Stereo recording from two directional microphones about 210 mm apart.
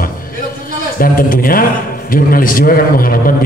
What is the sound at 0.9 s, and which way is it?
A man's voice, 40° left (ahead or behind).